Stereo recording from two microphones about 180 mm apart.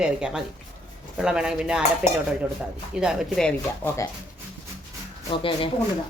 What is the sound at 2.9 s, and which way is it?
Speech, 5° right (ahead or behind).